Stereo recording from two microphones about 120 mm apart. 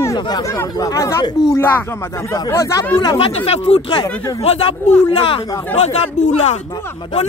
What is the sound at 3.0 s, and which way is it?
Speech, 45° left (ahead or behind).